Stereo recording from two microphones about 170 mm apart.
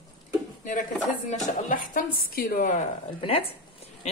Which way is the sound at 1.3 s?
50° left (ahead or behind).